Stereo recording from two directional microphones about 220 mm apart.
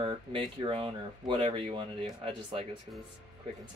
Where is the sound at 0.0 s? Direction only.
20° right (ahead or behind).